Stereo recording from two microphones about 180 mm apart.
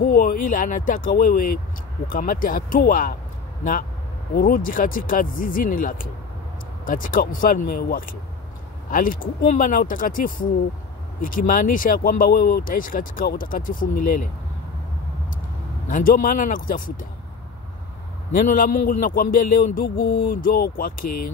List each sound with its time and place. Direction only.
0.0 s speech: 55° left (ahead or behind)
4.4 s speech: 50° left (ahead or behind)
15.9 s speech: 50° left (ahead or behind)
18.3 s speech: 50° left (ahead or behind)